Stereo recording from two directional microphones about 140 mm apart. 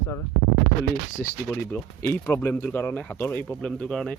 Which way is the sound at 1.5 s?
15° left (ahead or behind).